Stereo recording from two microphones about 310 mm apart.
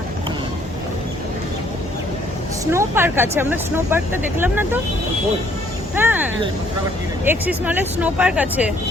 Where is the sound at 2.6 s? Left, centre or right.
Centre.